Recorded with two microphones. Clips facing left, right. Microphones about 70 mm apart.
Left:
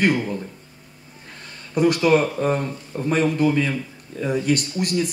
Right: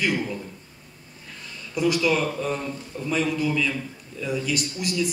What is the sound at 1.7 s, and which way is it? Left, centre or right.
Speech, left.